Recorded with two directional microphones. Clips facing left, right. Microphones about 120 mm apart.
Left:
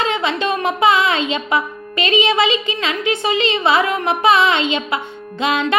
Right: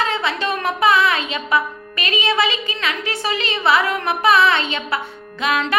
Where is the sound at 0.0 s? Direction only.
20° left (ahead or behind).